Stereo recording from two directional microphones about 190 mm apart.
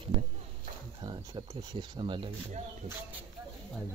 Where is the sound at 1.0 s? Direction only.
25° right (ahead or behind).